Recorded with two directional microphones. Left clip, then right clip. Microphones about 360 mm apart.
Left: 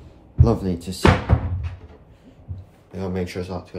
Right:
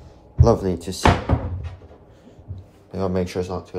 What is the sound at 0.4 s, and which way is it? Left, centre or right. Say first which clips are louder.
Speech: right 4 dB; centre.